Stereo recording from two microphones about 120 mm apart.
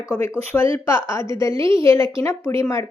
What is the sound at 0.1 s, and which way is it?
A woman's voice, 25° left (ahead or behind).